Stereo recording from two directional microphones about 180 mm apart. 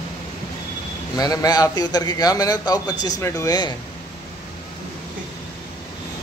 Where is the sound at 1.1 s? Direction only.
20° left (ahead or behind).